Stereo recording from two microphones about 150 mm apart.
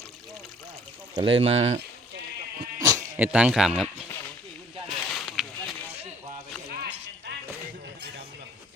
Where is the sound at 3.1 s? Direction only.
10° right (ahead or behind).